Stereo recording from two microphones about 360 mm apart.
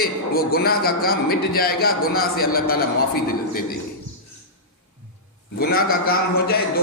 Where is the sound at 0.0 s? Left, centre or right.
Left.